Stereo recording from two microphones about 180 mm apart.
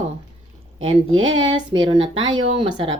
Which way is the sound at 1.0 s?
90° right.